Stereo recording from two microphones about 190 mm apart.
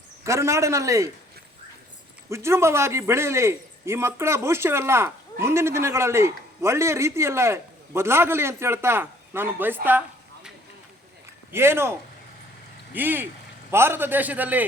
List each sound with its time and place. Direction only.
0.3 s a man's voice: 15° right (ahead or behind)
2.3 s a man's voice: 15° right (ahead or behind)
11.5 s a man's voice: 15° right (ahead or behind)